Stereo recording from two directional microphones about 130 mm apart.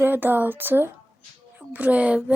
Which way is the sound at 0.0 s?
15° right (ahead or behind).